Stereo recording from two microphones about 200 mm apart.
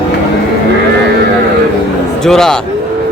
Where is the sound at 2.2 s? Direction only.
Centre (ahead or behind).